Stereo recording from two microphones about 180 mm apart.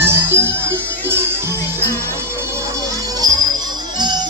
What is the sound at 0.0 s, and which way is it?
Music, 15° right (ahead or behind).